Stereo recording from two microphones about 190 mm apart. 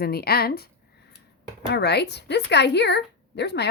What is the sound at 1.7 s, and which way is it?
A woman's voice, 60° left (ahead or behind).